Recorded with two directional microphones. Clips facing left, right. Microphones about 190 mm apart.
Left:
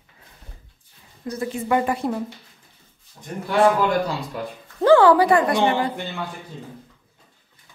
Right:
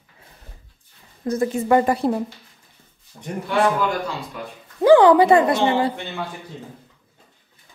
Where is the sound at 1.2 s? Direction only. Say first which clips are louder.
Right 5 dB; 40° right (ahead or behind).